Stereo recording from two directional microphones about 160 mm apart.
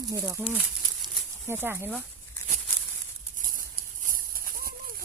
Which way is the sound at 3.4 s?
55° right (ahead or behind).